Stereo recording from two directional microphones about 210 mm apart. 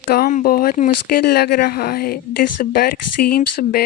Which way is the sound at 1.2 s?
50° left (ahead or behind).